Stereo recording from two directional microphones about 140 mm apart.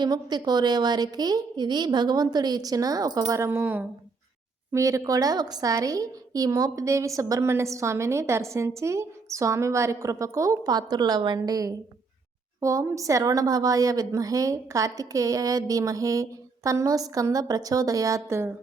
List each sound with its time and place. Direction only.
0.0 s a woman's voice: 30° right (ahead or behind); by 3.8 s 10° right (ahead or behind)
4.7 s a woman's voice: 25° right (ahead or behind)